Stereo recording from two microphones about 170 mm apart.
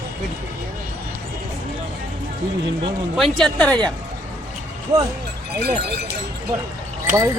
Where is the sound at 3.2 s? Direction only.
Centre (ahead or behind).